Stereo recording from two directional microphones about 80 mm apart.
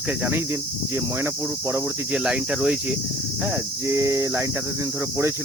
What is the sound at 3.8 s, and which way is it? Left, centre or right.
Cricket, right.